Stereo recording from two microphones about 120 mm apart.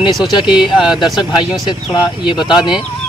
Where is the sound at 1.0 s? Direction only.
35° left (ahead or behind).